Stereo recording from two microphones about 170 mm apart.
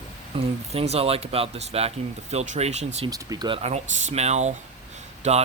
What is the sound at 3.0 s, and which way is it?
Speech, 20° right (ahead or behind).